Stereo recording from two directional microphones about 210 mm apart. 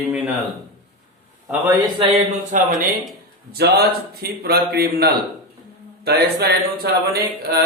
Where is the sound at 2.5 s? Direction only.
40° right (ahead or behind).